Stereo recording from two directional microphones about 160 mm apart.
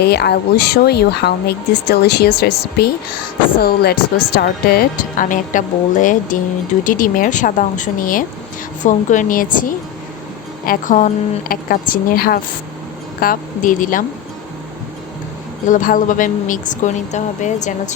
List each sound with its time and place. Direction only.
0.0 s speech: 90° left; by 3.9 s 75° left (ahead or behind)
4.4 s speech: 60° left (ahead or behind)
15.6 s speech: 55° left (ahead or behind)